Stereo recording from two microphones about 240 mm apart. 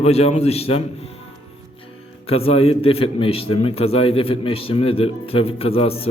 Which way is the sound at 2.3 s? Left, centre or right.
Left.